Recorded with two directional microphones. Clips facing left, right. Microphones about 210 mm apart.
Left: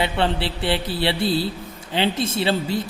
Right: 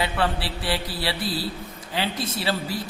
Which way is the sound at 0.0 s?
25° left (ahead or behind).